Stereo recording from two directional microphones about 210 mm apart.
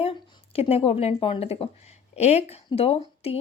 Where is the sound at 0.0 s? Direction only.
25° left (ahead or behind).